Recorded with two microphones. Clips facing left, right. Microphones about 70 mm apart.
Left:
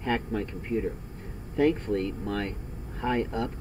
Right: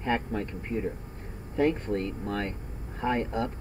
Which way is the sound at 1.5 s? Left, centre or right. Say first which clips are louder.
Left 2 dB; right.